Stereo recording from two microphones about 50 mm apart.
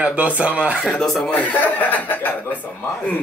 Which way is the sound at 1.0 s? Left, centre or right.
Centre.